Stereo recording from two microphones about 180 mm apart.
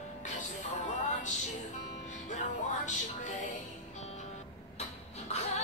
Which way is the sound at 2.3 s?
40° left (ahead or behind).